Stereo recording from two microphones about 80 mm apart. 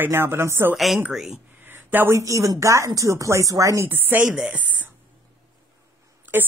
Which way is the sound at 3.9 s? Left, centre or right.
Right.